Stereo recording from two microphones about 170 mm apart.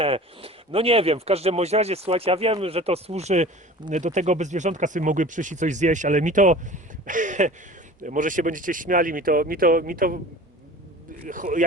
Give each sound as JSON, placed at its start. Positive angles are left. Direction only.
{"t": 0.0, "sound": "speech", "side_deg": -35}
{"t": 11.3, "sound": "speech", "side_deg": -50}